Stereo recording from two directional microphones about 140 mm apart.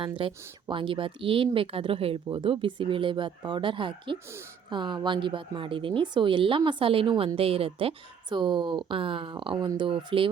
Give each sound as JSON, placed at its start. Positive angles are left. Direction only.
{"t": 0.0, "sound": "speech", "side_deg": -40}